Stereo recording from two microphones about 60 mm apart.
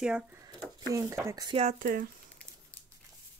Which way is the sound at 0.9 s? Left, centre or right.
Right.